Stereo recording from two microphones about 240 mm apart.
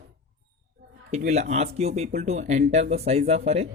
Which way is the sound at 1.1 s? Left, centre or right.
Right.